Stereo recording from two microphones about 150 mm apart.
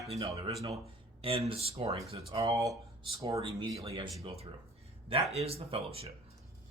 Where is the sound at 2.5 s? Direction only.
20° right (ahead or behind).